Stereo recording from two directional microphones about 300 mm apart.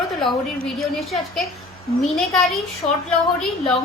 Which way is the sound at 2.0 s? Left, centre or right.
Centre.